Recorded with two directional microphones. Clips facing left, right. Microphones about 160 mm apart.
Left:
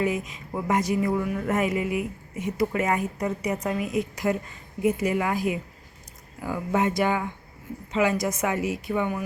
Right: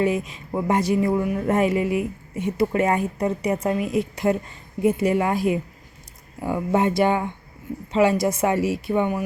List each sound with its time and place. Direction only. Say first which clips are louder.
0.0 s a woman's voice: right 4 dB; 30° right (ahead or behind)